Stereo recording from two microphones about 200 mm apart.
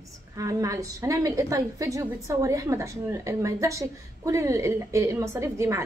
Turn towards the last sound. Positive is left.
turn(degrees=-15)  # may be behind; listen again after turning